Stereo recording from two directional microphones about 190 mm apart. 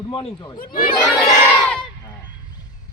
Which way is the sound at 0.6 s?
50° left (ahead or behind).